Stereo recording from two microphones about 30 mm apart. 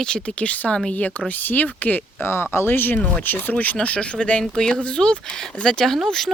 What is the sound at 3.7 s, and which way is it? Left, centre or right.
Speech, left.